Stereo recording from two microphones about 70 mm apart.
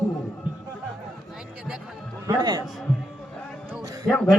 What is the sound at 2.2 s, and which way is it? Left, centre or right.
Speech, right.